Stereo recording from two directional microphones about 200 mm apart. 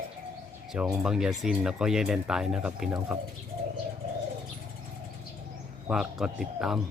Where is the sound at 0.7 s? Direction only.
Centre (ahead or behind).